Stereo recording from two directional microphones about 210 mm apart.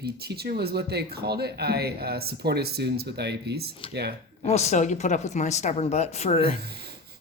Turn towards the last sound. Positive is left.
turn(degrees=30)  # may be behind; listen again after turning